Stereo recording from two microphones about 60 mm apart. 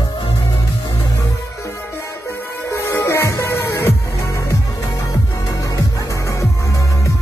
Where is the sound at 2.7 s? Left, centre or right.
Left.